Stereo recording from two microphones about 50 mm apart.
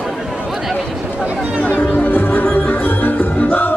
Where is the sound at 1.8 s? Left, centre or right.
Left.